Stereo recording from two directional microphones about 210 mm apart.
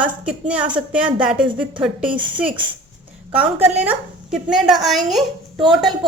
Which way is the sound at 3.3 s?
10° right (ahead or behind).